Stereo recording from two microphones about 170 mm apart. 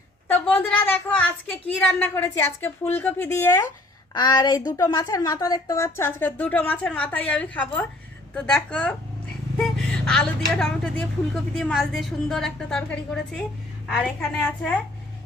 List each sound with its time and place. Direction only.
0.3 s a woman's voice: 10° left (ahead or behind)